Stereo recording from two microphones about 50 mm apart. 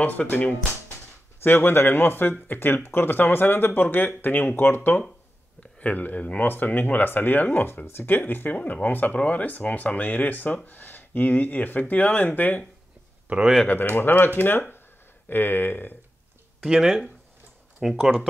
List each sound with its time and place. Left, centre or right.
0.3 s speech: left
5.6 s speech: left
7.6 s speech: left
13.3 s speech: right
13.7 s speech: left
16.6 s speech: centre